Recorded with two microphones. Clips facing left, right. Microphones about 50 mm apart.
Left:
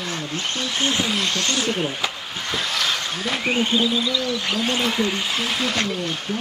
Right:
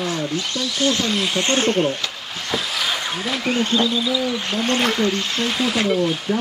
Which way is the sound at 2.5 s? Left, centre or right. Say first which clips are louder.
Right 1 dB; centre.